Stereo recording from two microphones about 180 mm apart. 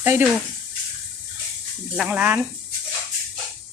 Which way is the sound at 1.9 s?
5° right (ahead or behind).